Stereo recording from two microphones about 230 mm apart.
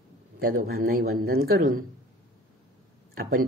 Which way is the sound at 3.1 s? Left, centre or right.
Right.